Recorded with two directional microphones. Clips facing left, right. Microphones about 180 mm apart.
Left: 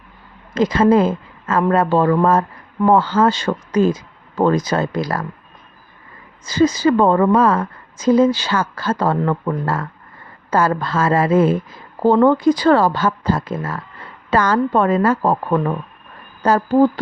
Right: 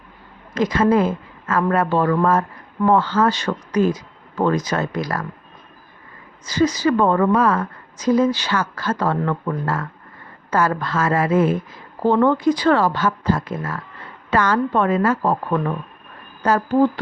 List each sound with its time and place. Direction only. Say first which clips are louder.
0.5 s a woman's voice: left 3 dB; 30° left (ahead or behind)
6.4 s a woman's voice: left 3 dB; 30° left (ahead or behind)